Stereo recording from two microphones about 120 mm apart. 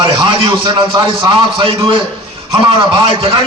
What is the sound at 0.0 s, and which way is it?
A man's voice, 40° right (ahead or behind).